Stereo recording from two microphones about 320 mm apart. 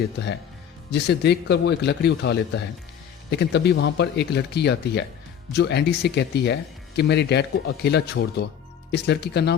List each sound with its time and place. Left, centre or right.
0.9 s speech: left